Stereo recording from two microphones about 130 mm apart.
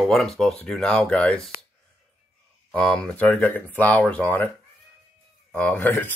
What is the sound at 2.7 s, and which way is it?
Speech, 10° left (ahead or behind).